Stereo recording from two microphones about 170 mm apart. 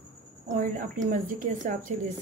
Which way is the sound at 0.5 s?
55° right (ahead or behind).